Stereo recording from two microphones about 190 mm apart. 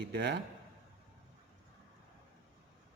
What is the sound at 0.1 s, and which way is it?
Speech, 60° right (ahead or behind).